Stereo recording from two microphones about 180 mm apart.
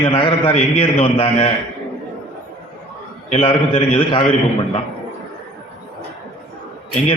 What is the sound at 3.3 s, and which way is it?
Speech, 35° left (ahead or behind).